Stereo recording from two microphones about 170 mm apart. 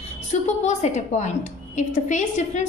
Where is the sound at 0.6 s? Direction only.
45° left (ahead or behind).